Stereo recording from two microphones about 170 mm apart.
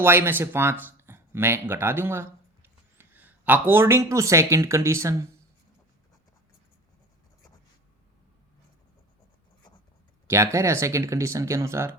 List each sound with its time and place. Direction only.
0.0 s speech: 15° right (ahead or behind)
10.2 s speech: 15° right (ahead or behind)